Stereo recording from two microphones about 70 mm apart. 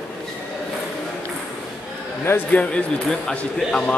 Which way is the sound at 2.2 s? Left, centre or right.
Left.